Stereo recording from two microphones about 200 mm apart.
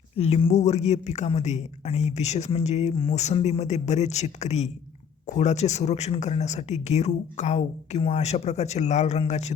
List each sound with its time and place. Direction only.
0.2 s speech: 30° left (ahead or behind)